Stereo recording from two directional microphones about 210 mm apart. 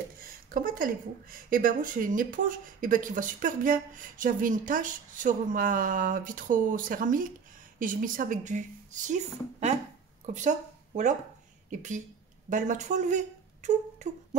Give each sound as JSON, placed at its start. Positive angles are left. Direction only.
{"t": 0.2, "sound": "a sound", "side_deg": -40}
{"t": 1.3, "sound": "speech", "side_deg": -40}
{"t": 10.2, "sound": "speech", "side_deg": -35}